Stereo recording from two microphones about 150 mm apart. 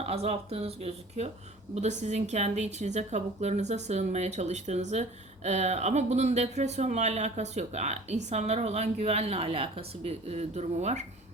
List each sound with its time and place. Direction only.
0.0 s speech: 45° right (ahead or behind)